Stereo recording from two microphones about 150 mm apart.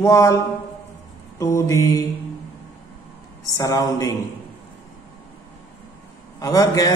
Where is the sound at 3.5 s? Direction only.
25° left (ahead or behind).